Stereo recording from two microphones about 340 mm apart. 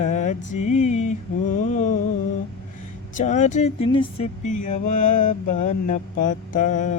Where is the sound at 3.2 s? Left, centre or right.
Left.